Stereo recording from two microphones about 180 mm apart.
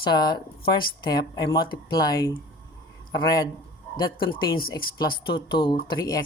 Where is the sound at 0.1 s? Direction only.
25° left (ahead or behind).